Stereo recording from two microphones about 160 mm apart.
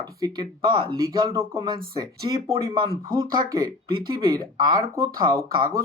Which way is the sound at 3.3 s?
25° right (ahead or behind).